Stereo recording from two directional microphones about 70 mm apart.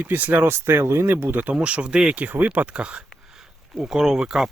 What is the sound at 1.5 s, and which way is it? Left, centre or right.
Speech, centre.